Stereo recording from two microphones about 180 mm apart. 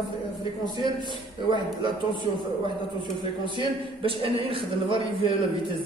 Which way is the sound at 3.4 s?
30° right (ahead or behind).